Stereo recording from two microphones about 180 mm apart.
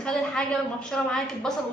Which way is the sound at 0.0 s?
5° left (ahead or behind).